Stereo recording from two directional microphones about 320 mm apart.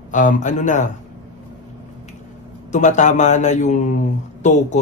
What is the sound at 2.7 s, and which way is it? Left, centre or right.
Speech, left.